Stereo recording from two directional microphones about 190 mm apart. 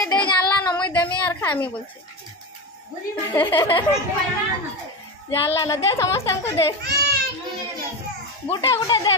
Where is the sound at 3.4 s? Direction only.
25° left (ahead or behind).